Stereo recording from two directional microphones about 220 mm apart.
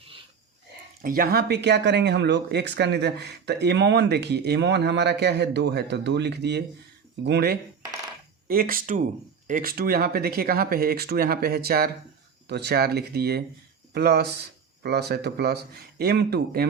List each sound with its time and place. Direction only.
1.0 s speech: 40° right (ahead or behind)